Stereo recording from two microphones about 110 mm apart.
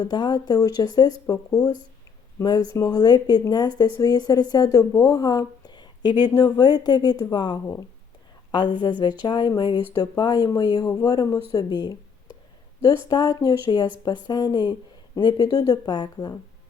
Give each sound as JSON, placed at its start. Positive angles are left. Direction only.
{"t": 0.0, "sound": "speech", "side_deg": 40}
{"t": 2.7, "sound": "a woman's voice", "side_deg": 35}
{"t": 13.1, "sound": "speech", "side_deg": 40}